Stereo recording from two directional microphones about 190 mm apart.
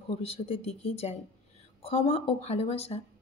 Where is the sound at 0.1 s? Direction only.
30° left (ahead or behind).